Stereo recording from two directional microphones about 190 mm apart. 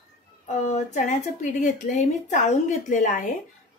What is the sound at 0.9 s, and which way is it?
A woman's voice, 40° left (ahead or behind).